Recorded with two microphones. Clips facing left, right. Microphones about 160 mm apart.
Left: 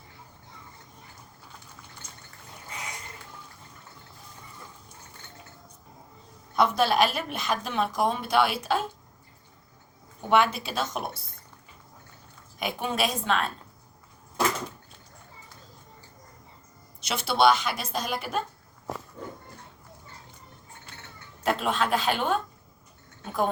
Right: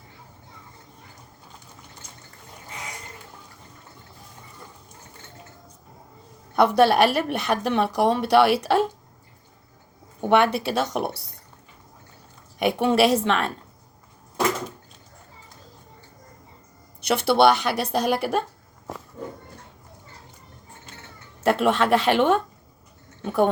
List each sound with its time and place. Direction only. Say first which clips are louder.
6.6 s a woman's voice: right 6 dB; 65° right (ahead or behind)
10.2 s a woman's voice: right 4 dB; 65° right (ahead or behind)
12.5 s a woman's voice: right 9 dB; 75° right (ahead or behind)
17.0 s a woman's voice: right 5 dB; 60° right (ahead or behind)
21.4 s a woman's voice: right 6 dB; 70° right (ahead or behind)